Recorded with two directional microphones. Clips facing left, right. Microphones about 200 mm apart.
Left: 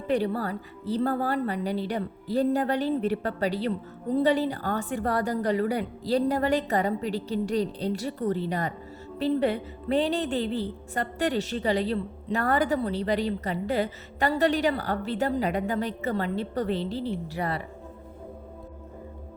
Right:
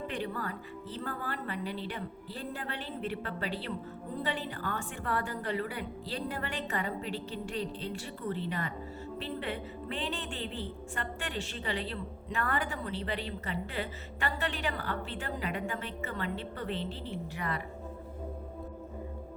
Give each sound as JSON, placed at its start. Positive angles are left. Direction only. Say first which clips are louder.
{"t": 0.1, "sound": "a woman's voice", "louder": "left 10 dB", "side_deg": 35}